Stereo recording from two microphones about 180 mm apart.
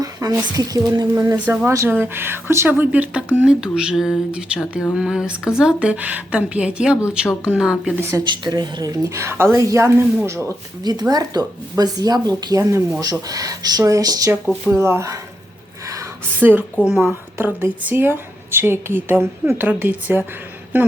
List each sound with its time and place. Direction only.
0.0 s a woman's voice: 20° right (ahead or behind)
8.1 s a woman's voice: 20° right (ahead or behind)
15.9 s a sound: 15° right (ahead or behind)
16.8 s a woman's voice: centre (ahead or behind)